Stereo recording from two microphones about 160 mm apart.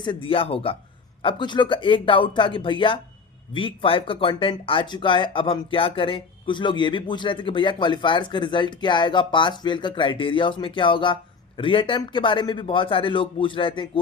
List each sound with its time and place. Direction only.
0.0 s speech: 30° left (ahead or behind)